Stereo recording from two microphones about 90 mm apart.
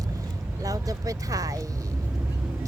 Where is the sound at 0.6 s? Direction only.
40° right (ahead or behind).